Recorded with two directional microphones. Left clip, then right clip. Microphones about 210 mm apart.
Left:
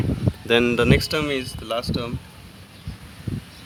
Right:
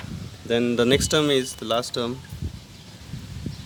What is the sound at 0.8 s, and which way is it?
Speech, 25° right (ahead or behind).